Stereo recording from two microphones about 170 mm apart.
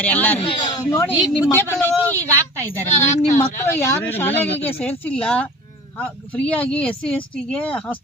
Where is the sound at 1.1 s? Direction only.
5° right (ahead or behind).